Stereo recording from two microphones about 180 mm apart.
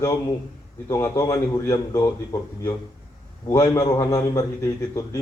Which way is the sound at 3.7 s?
20° left (ahead or behind).